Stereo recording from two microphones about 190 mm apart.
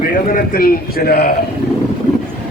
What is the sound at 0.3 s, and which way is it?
A man's voice, 45° left (ahead or behind).